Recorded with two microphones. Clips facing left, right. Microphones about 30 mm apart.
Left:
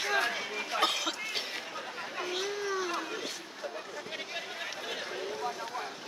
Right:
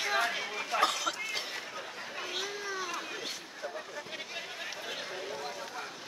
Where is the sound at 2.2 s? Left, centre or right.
Centre.